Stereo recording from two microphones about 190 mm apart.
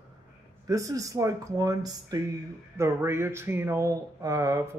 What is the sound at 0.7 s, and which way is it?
Speech, 15° right (ahead or behind).